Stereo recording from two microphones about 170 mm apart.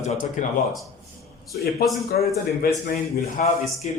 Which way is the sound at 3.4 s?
50° left (ahead or behind).